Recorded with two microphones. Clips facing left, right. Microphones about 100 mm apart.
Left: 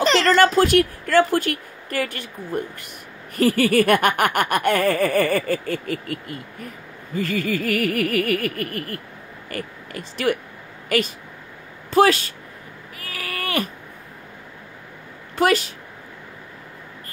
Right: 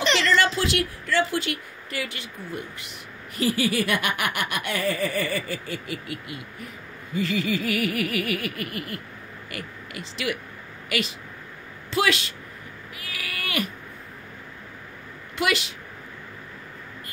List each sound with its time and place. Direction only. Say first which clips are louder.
0.0 s laughter: left 6 dB; 40° left (ahead or behind)
9.5 s speech: left 6 dB; 40° left (ahead or behind)
13.0 s a sound: left 5 dB; 40° left (ahead or behind)
15.3 s speech: left 7 dB; 40° left (ahead or behind)